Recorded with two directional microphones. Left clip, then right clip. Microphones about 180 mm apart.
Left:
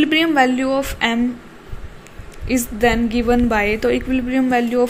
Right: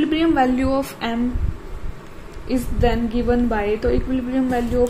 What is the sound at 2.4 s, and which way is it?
A woman's voice, 30° left (ahead or behind).